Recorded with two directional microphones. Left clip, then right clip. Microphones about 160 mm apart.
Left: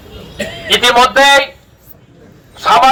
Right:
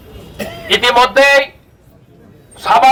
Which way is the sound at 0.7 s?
15° right (ahead or behind).